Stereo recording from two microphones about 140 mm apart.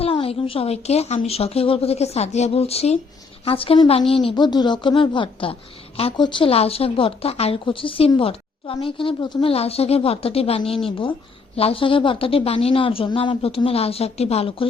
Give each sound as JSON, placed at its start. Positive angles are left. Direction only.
{"t": 0.0, "sound": "a woman's voice", "side_deg": 40}